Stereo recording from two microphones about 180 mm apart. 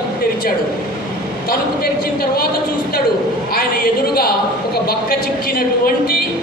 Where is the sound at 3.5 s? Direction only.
60° left (ahead or behind).